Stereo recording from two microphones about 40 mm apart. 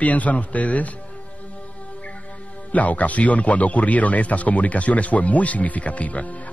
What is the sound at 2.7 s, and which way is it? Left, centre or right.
Speech, left.